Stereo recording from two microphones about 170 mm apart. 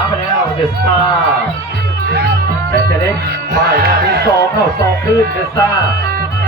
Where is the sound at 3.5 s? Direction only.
70° right (ahead or behind).